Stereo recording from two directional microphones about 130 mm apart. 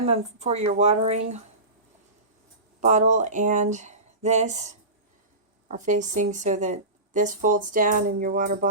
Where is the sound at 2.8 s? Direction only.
70° right (ahead or behind).